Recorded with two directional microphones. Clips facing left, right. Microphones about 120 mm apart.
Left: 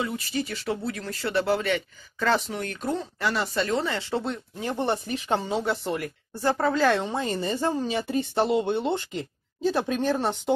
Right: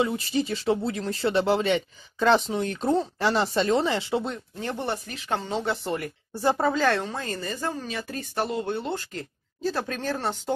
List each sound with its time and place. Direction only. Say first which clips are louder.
0.0 s speech: right 4 dB; 25° right (ahead or behind)
4.1 s speech: right 1 dB; centre (ahead or behind)
4.6 s speech: left 4 dB; 15° left (ahead or behind)
5.6 s speech: left 1 dB; centre (ahead or behind)
6.4 s speech: right 1 dB; 15° right (ahead or behind)
6.7 s speech: left 1 dB; 5° left (ahead or behind)
7.0 s speech: left 3 dB; 20° left (ahead or behind)